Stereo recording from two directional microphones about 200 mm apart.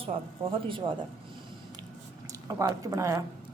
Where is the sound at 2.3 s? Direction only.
15° right (ahead or behind).